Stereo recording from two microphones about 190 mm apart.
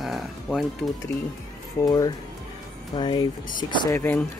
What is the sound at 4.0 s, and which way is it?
Speech, 10° left (ahead or behind).